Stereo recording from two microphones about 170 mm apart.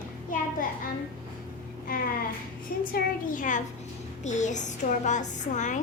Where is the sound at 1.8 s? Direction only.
60° left (ahead or behind).